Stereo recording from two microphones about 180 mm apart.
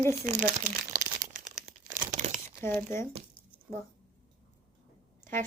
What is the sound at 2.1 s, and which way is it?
Crumpling, 40° right (ahead or behind).